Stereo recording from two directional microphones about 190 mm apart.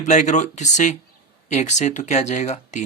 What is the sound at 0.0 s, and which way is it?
Speech, 40° left (ahead or behind).